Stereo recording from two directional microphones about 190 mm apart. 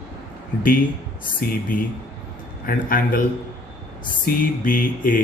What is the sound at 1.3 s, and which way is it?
Speech, 50° left (ahead or behind).